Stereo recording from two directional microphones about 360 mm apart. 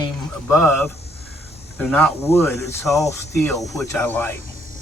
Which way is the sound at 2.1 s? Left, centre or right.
Centre.